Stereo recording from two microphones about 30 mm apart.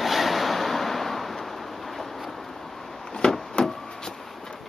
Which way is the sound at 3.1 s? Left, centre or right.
Left.